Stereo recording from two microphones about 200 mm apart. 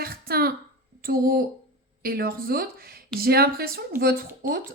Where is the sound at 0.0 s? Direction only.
50° right (ahead or behind).